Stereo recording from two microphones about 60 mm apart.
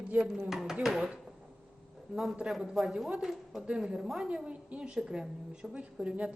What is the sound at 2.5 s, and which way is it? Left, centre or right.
A woman's voice, centre.